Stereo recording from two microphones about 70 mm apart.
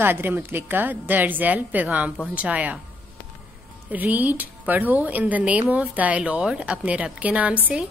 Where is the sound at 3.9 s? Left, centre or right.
Right.